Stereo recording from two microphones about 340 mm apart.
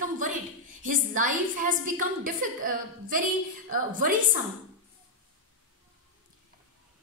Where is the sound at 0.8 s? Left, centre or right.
Right.